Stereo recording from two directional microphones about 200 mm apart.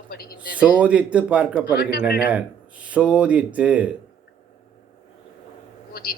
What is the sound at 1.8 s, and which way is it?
Speech, 50° left (ahead or behind).